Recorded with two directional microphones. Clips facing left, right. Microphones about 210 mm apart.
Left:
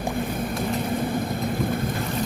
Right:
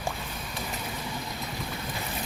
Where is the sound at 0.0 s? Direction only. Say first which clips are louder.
Left 10 dB; 55° left (ahead or behind).